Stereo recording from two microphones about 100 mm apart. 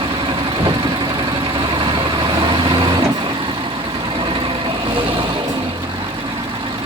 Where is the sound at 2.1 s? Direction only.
50° right (ahead or behind).